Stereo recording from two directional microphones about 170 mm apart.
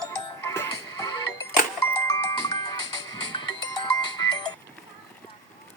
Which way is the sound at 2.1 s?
20° left (ahead or behind).